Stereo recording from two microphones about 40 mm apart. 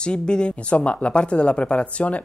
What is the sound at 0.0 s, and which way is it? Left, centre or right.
Speech, left.